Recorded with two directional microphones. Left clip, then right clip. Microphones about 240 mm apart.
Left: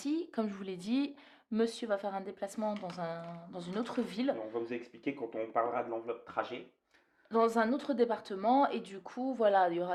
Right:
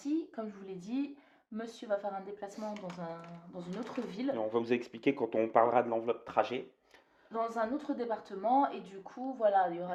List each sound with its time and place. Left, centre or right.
0.0 s a woman's voice: left
4.5 s speech: right
7.3 s a woman's voice: left